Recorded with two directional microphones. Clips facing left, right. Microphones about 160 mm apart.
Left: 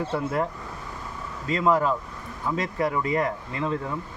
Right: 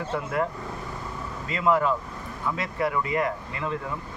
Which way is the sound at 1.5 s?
35° left (ahead or behind).